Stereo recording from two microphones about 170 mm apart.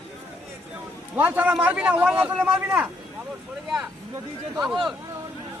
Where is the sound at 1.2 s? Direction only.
10° right (ahead or behind).